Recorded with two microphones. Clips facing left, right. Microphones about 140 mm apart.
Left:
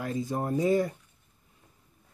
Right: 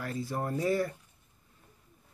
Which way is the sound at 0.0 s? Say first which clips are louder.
Left 3 dB; 20° left (ahead or behind).